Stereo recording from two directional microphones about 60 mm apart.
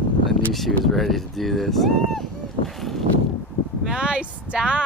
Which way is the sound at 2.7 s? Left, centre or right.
Centre.